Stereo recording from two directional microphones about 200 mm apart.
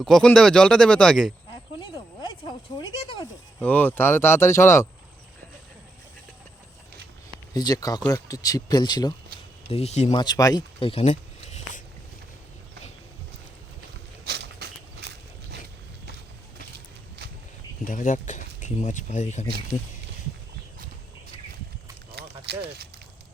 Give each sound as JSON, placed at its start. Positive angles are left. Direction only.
{"t": 0.0, "sound": "speech", "side_deg": 5}
{"t": 1.8, "sound": "a sound", "side_deg": 25}
{"t": 3.6, "sound": "speech", "side_deg": 5}
{"t": 7.5, "sound": "speech", "side_deg": 20}
{"t": 9.6, "sound": "speech", "side_deg": 30}
{"t": 10.2, "sound": "speech", "side_deg": 20}
{"t": 14.3, "sound": "a sound", "side_deg": -55}
{"t": 17.8, "sound": "speech", "side_deg": 40}
{"t": 22.4, "sound": "speech", "side_deg": -55}